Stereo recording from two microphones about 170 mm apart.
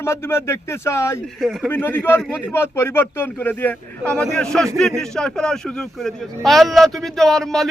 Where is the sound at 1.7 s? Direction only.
10° left (ahead or behind).